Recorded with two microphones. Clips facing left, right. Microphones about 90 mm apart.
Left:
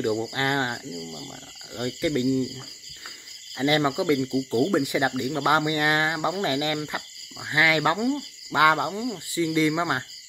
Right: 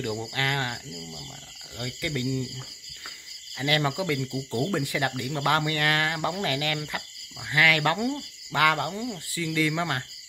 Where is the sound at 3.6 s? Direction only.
25° left (ahead or behind).